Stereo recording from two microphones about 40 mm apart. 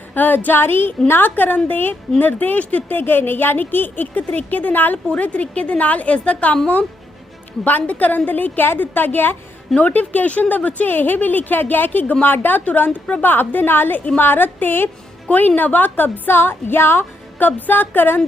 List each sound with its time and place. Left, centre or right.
0.1 s a woman's voice: left
1.4 s a woman's voice: left
2.6 s a woman's voice: left
2.9 s a woman's voice: left
5.0 s a woman's voice: left
7.6 s a woman's voice: left
8.6 s a woman's voice: left
9.7 s a woman's voice: left
10.9 s a woman's voice: left
17.4 s a woman's voice: left